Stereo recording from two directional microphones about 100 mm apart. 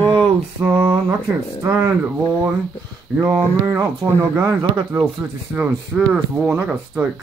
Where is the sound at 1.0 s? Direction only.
25° right (ahead or behind).